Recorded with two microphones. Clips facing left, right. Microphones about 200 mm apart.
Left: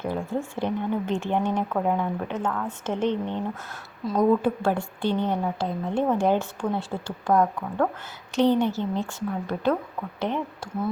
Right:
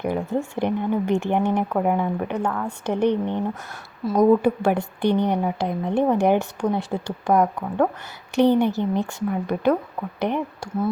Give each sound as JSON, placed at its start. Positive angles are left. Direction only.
{"t": 0.0, "sound": "a woman's voice", "side_deg": -20}